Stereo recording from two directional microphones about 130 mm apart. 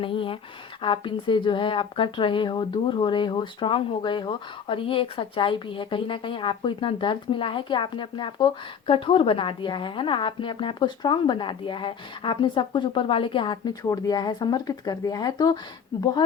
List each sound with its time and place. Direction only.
0.0 s speech: 45° left (ahead or behind)